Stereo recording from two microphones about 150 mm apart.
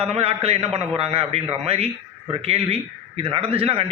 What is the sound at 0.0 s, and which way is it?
A man's voice, 40° right (ahead or behind).